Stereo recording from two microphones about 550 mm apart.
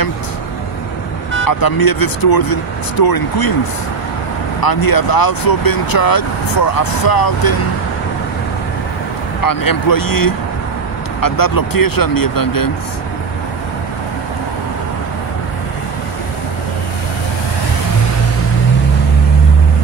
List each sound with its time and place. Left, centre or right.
1.4 s speech: left
4.6 s speech: left
9.4 s speech: left